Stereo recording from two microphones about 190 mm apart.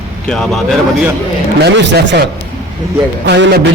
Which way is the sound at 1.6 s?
70° right (ahead or behind).